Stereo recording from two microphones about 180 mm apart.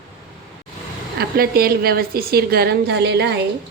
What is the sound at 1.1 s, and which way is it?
A woman's voice, 55° right (ahead or behind).